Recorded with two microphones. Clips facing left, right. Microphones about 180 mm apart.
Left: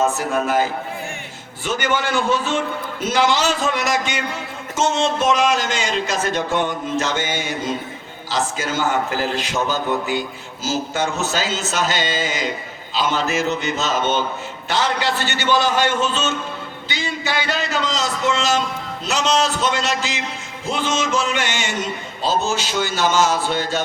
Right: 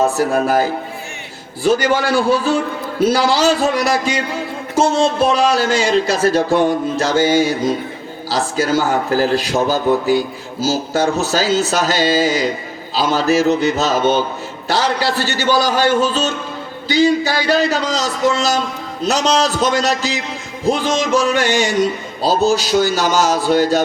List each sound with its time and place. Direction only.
0.0 s a man's voice: 35° right (ahead or behind)